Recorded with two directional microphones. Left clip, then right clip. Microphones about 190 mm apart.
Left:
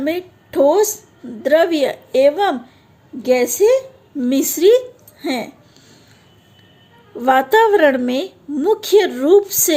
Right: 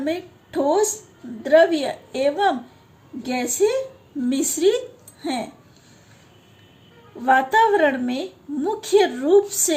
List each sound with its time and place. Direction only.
0.0 s a woman's voice: 50° left (ahead or behind)
7.2 s a woman's voice: 55° left (ahead or behind)